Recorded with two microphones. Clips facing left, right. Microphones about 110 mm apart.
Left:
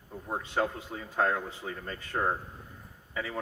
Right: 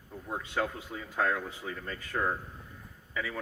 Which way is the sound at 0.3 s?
35° left (ahead or behind).